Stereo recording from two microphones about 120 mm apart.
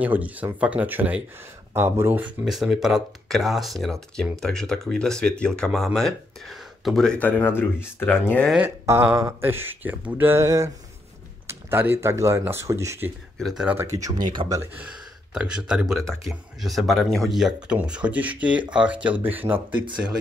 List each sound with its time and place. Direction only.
0.0 s speech: 15° right (ahead or behind)
2.4 s speech: centre (ahead or behind); by 8.5 s 15° left (ahead or behind)
8.6 s speech: 20° right (ahead or behind)
13.4 s speech: centre (ahead or behind)
14.0 s speech: 35° right (ahead or behind)
14.8 s speech: 10° right (ahead or behind)